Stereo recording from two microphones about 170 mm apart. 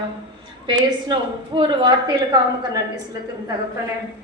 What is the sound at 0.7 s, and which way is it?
A woman's voice, 30° right (ahead or behind).